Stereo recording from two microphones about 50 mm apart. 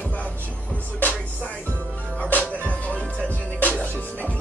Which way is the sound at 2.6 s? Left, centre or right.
Left.